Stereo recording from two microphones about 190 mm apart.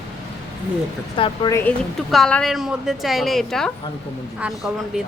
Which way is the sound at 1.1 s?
25° left (ahead or behind).